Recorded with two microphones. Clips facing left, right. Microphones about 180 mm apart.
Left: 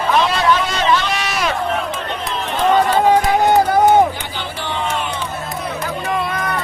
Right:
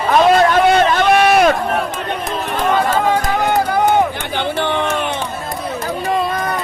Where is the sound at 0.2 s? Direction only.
50° right (ahead or behind).